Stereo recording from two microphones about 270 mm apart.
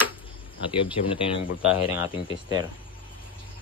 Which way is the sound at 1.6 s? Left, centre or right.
Centre.